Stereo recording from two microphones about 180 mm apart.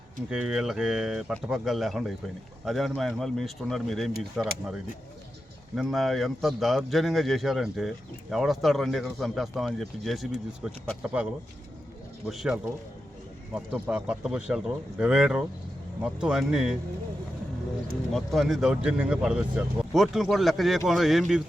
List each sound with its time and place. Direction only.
0.3 s a man's voice: 5° right (ahead or behind)
12.3 s a man's voice: centre (ahead or behind)
18.1 s a man's voice: centre (ahead or behind)